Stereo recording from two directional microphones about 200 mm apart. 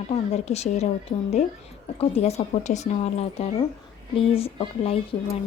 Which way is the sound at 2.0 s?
30° left (ahead or behind).